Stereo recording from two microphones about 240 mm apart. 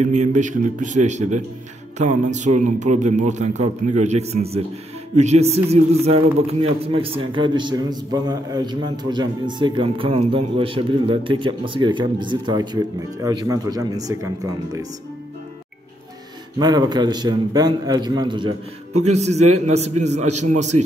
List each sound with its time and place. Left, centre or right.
0.0 s a man's voice: right; by 14.9 s centre
16.5 s a man's voice: centre